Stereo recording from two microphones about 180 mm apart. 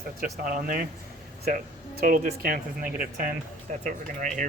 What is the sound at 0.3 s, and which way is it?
Speech, 55° right (ahead or behind).